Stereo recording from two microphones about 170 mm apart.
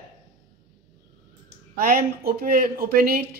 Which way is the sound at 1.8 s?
60° right (ahead or behind).